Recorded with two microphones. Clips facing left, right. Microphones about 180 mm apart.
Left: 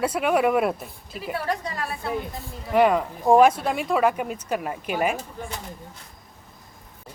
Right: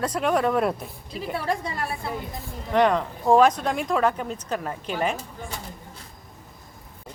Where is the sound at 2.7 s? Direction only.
5° left (ahead or behind).